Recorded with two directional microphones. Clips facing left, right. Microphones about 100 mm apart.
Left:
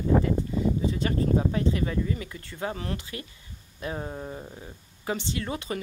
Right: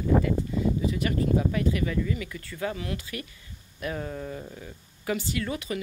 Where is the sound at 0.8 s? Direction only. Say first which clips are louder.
Even; 30° left (ahead or behind).